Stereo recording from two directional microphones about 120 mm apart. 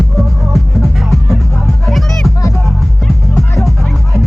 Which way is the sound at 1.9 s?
Centre (ahead or behind).